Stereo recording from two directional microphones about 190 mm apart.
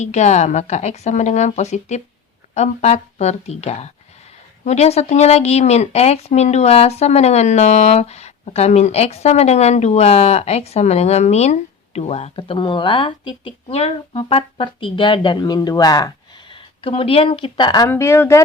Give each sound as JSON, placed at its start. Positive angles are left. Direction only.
{"t": 0.0, "sound": "speech", "side_deg": 35}